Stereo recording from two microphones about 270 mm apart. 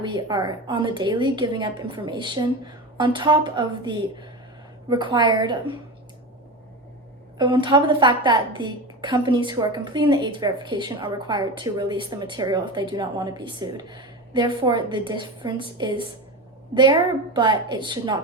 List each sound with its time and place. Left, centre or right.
0.3 s a woman's voice: centre
7.3 s a woman's voice: centre